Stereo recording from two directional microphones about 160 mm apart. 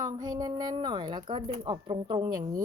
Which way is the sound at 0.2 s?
25° right (ahead or behind).